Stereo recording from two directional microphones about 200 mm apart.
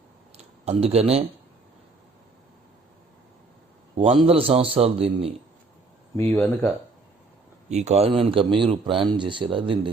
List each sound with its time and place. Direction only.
0.3 s speech: 30° right (ahead or behind)
3.9 s speech: 30° right (ahead or behind)
6.1 s speech: 10° left (ahead or behind)
7.7 s speech: 35° right (ahead or behind)